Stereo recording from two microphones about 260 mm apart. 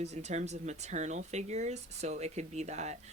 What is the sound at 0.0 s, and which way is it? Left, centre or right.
Speech, right.